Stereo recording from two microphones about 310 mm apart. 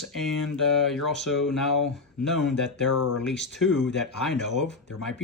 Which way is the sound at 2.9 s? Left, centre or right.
Left.